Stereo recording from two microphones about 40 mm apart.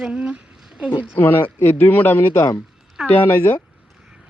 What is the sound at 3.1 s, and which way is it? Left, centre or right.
Speech, left.